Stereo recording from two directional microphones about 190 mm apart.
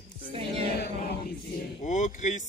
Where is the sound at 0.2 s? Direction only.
30° right (ahead or behind).